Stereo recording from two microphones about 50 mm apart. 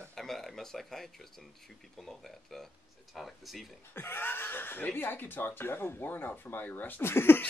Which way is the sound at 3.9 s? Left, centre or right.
Left.